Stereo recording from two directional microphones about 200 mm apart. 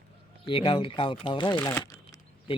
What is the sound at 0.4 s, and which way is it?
Speech, 25° left (ahead or behind).